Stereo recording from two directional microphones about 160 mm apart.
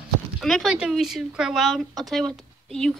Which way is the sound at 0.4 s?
Centre (ahead or behind).